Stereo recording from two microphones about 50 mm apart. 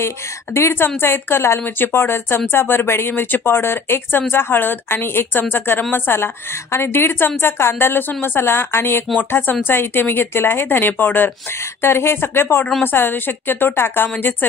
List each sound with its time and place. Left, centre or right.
0.6 s a woman's voice: left
3.1 s a woman's voice: left
11.8 s a woman's voice: left